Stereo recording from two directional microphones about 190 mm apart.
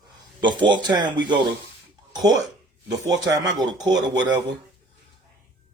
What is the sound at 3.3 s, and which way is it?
Speech, 20° right (ahead or behind).